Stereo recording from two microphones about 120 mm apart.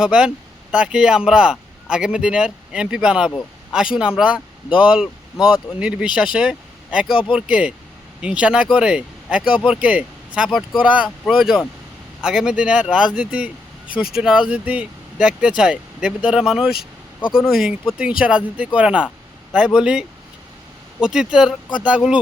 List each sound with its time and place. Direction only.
0.0 s speech: 5° right (ahead or behind)
7.1 s speech: 45° left (ahead or behind)
7.3 s speech: 10° right (ahead or behind)
12.2 s speech: 5° right (ahead or behind)